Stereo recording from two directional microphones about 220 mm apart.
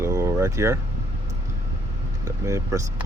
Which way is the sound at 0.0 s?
15° right (ahead or behind).